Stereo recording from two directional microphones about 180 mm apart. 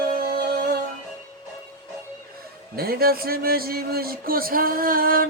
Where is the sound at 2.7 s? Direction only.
55° right (ahead or behind).